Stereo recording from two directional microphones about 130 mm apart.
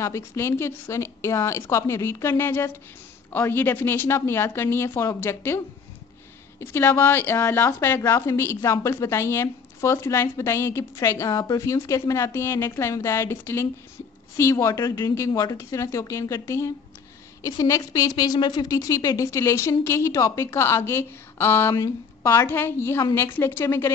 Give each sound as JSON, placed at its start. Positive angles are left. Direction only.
{"t": 0.0, "sound": "a woman's voice", "side_deg": 20}
{"t": 6.6, "sound": "a woman's voice", "side_deg": 20}